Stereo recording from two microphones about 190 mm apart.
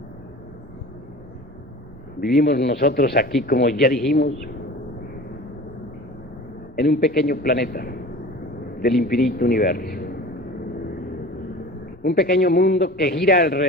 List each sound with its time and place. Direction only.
2.2 s a man's voice: 55° left (ahead or behind)
6.7 s a man's voice: 50° left (ahead or behind)
12.0 s a man's voice: 55° left (ahead or behind)